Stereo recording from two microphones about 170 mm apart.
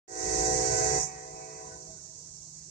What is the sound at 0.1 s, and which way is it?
Train, 50° left (ahead or behind).